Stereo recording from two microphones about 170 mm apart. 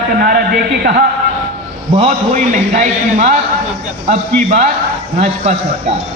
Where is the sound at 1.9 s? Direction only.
40° right (ahead or behind).